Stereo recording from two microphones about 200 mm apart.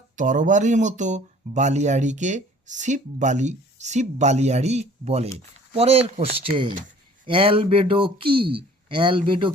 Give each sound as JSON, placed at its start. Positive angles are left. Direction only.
{"t": 0.2, "sound": "a man's voice", "side_deg": -40}